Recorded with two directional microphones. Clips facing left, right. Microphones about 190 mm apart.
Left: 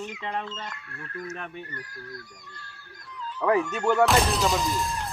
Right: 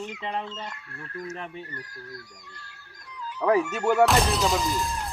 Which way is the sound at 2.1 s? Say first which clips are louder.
Left 1 dB; 20° right (ahead or behind).